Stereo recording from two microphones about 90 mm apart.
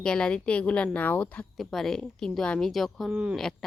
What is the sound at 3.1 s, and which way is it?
Speech, 10° right (ahead or behind).